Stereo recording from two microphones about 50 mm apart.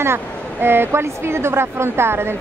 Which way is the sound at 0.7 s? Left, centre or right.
Right.